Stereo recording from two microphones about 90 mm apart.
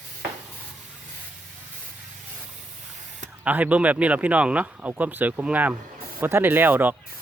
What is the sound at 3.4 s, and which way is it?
Speech, 15° right (ahead or behind).